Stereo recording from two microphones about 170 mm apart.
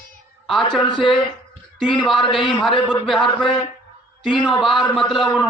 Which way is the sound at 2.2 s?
30° left (ahead or behind).